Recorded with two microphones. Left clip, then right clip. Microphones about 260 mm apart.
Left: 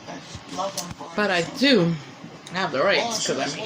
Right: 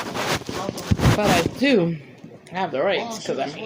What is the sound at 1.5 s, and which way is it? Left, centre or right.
Speech, centre.